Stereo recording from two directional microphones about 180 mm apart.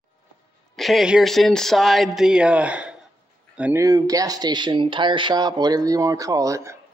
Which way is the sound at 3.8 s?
20° right (ahead or behind).